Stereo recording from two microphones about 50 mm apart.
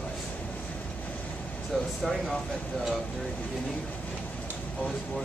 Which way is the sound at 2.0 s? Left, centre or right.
Centre.